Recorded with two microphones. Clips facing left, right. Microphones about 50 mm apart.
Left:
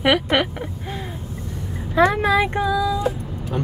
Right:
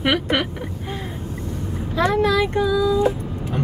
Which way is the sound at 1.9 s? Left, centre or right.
Left.